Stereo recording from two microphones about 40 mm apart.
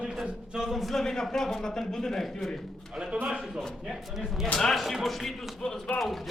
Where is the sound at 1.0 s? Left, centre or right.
Centre.